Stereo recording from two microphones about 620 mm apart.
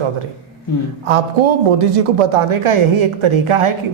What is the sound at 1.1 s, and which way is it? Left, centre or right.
A woman's voice, right.